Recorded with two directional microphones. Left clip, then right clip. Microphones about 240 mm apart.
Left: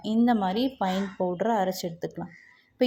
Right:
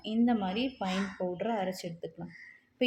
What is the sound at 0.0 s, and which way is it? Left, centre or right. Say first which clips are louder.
A woman's voice: left 6 dB; left.